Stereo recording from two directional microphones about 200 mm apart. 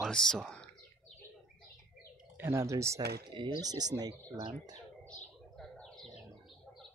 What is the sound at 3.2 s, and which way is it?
Speech, 20° right (ahead or behind).